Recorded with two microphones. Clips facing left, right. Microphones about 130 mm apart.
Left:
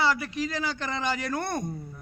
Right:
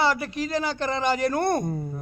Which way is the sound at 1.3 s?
40° right (ahead or behind).